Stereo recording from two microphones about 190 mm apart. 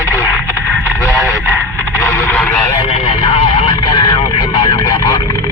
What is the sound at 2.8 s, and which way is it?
Speech, 30° left (ahead or behind).